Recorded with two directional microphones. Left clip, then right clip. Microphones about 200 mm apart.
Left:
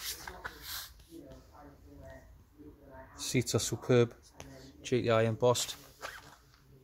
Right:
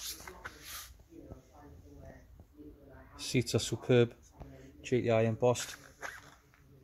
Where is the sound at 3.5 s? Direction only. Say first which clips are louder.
Even; 10° right (ahead or behind).